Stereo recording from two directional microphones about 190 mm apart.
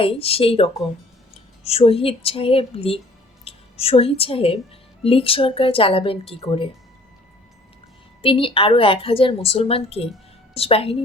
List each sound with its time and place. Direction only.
0.0 s a woman's voice: 30° left (ahead or behind)
8.2 s a woman's voice: 30° left (ahead or behind)